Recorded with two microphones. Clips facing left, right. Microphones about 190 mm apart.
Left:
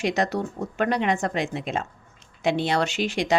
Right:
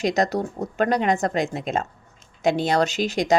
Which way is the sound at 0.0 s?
40° right (ahead or behind).